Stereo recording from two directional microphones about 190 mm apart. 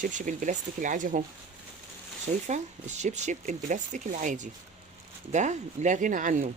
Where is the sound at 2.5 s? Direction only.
40° right (ahead or behind).